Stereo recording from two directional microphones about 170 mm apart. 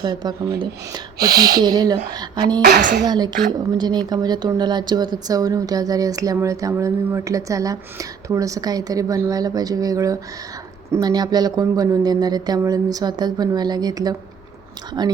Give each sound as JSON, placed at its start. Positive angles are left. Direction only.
{"t": 0.0, "sound": "speech", "side_deg": -25}
{"t": 1.3, "sound": "speech", "side_deg": -65}
{"t": 1.5, "sound": "speech", "side_deg": -25}
{"t": 3.1, "sound": "speech", "side_deg": -25}